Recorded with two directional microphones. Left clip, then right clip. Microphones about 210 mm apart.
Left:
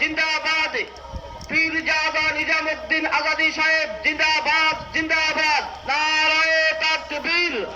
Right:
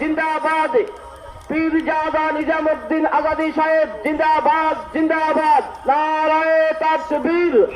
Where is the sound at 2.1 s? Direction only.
30° right (ahead or behind).